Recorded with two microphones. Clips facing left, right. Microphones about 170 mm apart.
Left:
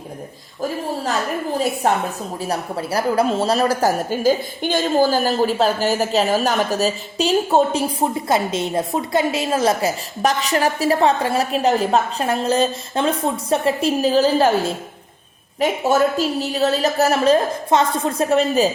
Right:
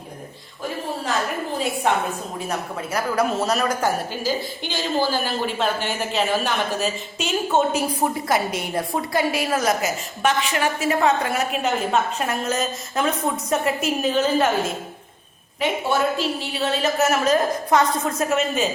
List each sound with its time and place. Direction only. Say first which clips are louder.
1.5 s a woman's voice: left 3 dB; 40° left (ahead or behind)